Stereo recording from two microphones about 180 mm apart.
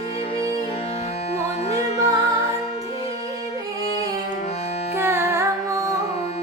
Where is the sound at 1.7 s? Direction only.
35° left (ahead or behind).